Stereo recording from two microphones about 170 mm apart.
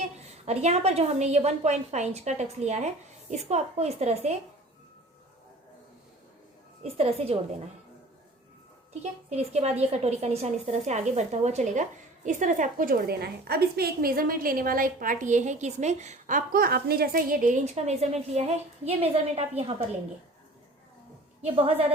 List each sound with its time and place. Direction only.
0.0 s a woman's voice: 40° right (ahead or behind)
6.8 s a woman's voice: 35° right (ahead or behind)
8.9 s a woman's voice: 40° right (ahead or behind)
21.4 s a woman's voice: 35° right (ahead or behind)